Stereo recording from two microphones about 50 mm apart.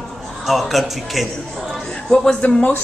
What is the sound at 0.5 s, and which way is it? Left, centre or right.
Speech, centre.